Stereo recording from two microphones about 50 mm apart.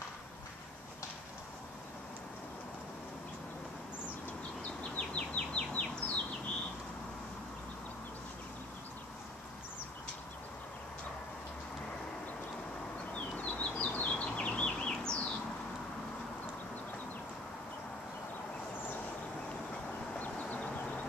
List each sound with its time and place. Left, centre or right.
4.9 s bird: left
13.1 s bird: left
20.2 s a sound: left